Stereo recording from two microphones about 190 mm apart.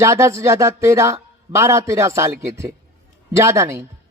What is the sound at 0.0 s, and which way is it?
Speech, 15° right (ahead or behind).